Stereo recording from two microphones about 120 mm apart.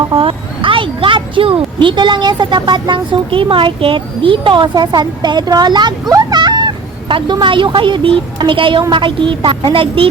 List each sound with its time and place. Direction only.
0.1 s speech: 50° right (ahead or behind)